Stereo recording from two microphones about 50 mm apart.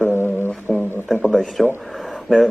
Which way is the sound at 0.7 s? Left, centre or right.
Centre.